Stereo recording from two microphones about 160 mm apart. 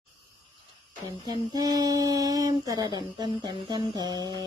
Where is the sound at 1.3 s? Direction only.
25° right (ahead or behind).